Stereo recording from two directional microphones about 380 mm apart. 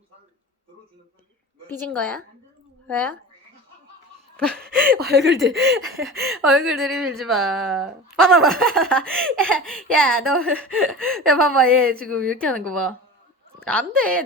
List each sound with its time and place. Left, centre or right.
1.8 s a woman's voice: centre
4.4 s laughter: centre
4.8 s speech: right
5.9 s a woman's voice: centre